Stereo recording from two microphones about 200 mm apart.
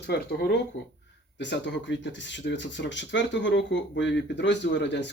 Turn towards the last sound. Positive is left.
turn(degrees=60)  # may be behind; listen again after turning